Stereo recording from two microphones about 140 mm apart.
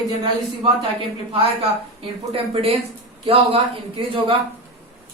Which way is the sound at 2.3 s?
40° right (ahead or behind).